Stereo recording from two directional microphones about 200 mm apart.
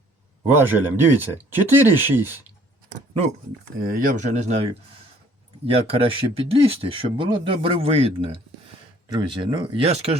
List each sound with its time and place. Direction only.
0.5 s speech: 10° right (ahead or behind)
3.9 s speech: 40° right (ahead or behind)